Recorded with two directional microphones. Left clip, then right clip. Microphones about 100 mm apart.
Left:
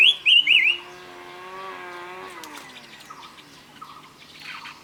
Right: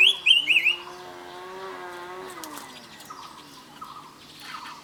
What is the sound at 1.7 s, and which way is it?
Vehicle, 25° left (ahead or behind).